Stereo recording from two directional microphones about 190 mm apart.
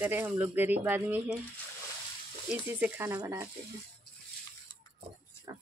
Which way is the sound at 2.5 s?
10° right (ahead or behind).